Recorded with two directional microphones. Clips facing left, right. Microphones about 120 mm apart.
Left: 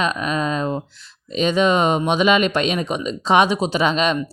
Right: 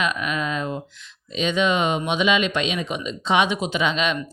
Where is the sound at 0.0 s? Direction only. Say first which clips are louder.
Left 3 dB; 35° left (ahead or behind).